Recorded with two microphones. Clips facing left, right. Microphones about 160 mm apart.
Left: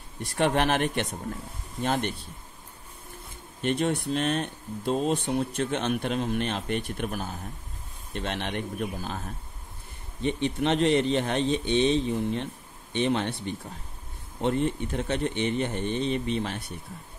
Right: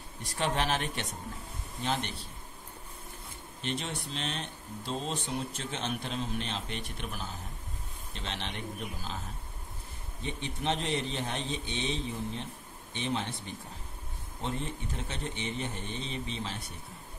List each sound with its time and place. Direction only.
0.2 s a man's voice: 60° left (ahead or behind)
3.6 s speech: 55° left (ahead or behind)
10.2 s a man's voice: 70° left (ahead or behind)